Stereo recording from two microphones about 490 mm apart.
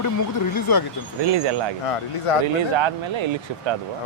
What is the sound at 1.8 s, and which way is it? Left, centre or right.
Speech, left.